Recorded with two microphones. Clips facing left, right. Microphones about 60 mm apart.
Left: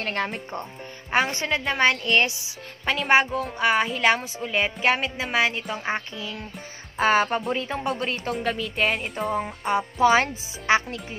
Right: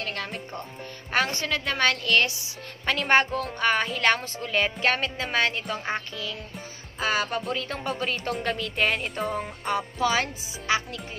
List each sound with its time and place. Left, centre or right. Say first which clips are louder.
0.0 s speech: left 5 dB; left
1.1 s a woman's voice: left 2 dB; left
2.8 s speech: left 2 dB; centre
7.0 s speech: left 6 dB; left
7.4 s speech: left 3 dB; centre
9.7 s speech: left 6 dB; left